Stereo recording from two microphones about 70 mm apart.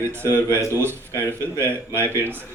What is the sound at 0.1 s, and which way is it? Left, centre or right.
Speech, right.